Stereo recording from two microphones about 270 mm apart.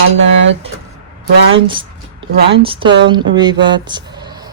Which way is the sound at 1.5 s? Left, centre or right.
Centre.